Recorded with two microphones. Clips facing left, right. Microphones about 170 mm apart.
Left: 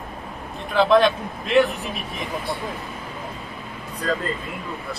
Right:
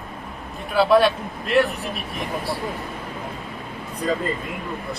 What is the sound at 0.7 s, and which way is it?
Speech, 5° right (ahead or behind).